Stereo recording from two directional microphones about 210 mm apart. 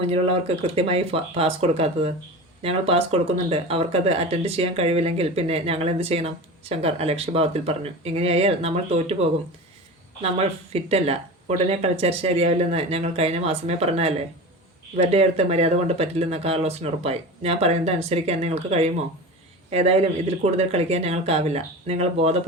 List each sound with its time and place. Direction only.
0.1 s speech: 30° right (ahead or behind)